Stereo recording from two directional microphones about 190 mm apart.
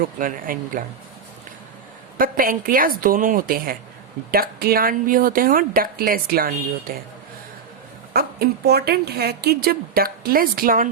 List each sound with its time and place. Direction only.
0.2 s a woman's voice: 45° right (ahead or behind)
2.1 s a woman's voice: 50° right (ahead or behind)
8.1 s a woman's voice: 55° right (ahead or behind)